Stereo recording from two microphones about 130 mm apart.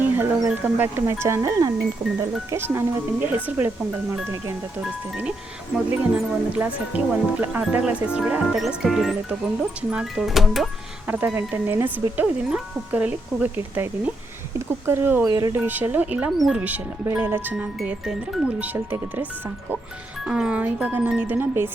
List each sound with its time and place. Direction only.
0.5 s speech: 15° right (ahead or behind)
4.8 s speech: 10° right (ahead or behind)
11.1 s speech: 15° right (ahead or behind)
15.3 s speech: 30° right (ahead or behind)
15.5 s speech: 15° right (ahead or behind)
20.2 s speech: 5° right (ahead or behind)